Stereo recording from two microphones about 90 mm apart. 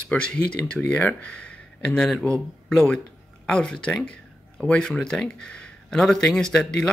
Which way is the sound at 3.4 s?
10° left (ahead or behind).